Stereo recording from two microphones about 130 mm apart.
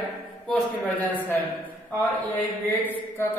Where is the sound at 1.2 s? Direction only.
15° left (ahead or behind).